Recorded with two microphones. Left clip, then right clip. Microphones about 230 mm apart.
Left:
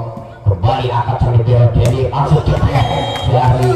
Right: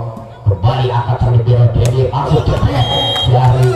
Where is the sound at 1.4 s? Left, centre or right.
Left.